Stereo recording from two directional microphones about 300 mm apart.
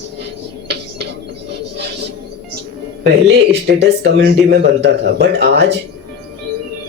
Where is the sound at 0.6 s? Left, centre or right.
Right.